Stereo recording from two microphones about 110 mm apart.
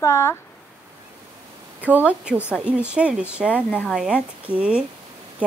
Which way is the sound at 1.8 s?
15° right (ahead or behind).